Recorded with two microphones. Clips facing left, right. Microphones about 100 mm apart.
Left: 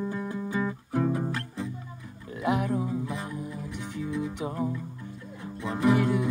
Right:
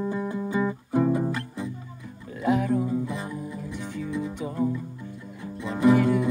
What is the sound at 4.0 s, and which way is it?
Music, 20° left (ahead or behind).